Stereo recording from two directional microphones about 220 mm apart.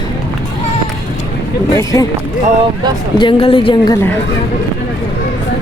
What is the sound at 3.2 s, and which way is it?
Speech, 20° left (ahead or behind).